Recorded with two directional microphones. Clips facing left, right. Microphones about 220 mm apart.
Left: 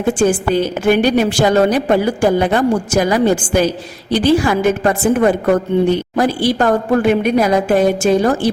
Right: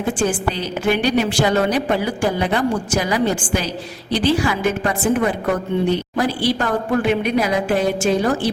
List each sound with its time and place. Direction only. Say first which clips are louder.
0.2 s a woman's voice: left 7 dB; 45° left (ahead or behind)